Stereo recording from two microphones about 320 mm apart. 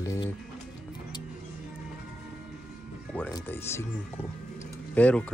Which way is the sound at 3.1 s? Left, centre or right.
Centre.